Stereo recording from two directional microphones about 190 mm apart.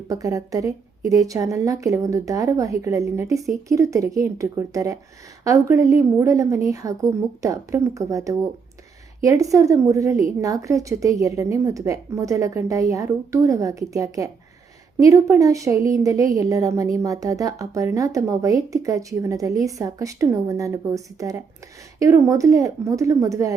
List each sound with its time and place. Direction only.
0.1 s a woman's voice: 20° right (ahead or behind)